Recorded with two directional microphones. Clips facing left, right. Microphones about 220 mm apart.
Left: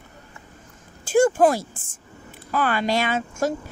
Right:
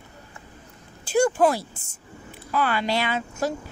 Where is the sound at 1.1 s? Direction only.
50° left (ahead or behind).